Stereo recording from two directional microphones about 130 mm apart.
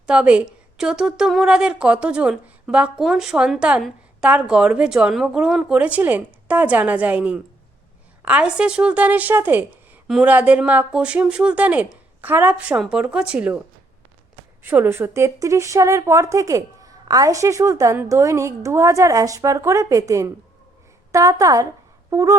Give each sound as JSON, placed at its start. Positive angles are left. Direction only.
{"t": 0.1, "sound": "speech", "side_deg": -10}
{"t": 14.6, "sound": "a woman's voice", "side_deg": -15}